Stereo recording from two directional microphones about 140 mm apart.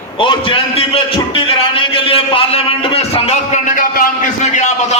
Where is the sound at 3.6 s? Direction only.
70° left (ahead or behind).